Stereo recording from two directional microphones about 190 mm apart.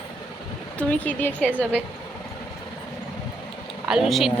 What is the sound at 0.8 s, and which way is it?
Speech, 10° left (ahead or behind).